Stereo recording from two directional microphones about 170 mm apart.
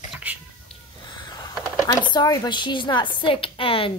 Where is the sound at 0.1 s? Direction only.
10° right (ahead or behind).